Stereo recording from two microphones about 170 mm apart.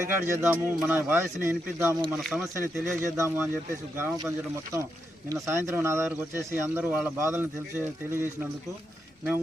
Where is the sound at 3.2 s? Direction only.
15° right (ahead or behind).